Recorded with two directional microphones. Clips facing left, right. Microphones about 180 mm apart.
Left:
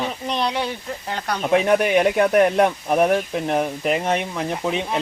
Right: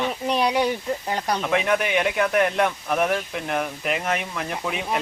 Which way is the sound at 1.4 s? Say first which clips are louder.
Left 8 dB; 35° left (ahead or behind).